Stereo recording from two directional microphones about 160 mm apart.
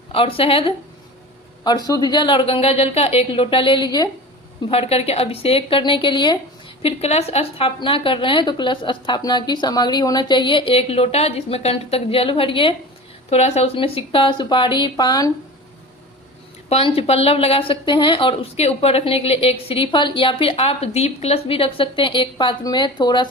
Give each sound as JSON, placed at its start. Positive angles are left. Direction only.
{"t": 0.1, "sound": "speech", "side_deg": 35}
{"t": 1.6, "sound": "speech", "side_deg": 25}
{"t": 4.7, "sound": "speech", "side_deg": 40}
{"t": 6.8, "sound": "speech", "side_deg": 40}
{"t": 16.6, "sound": "speech", "side_deg": 40}